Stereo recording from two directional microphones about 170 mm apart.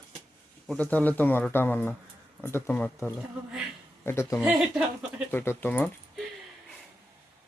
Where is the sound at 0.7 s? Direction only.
10° left (ahead or behind).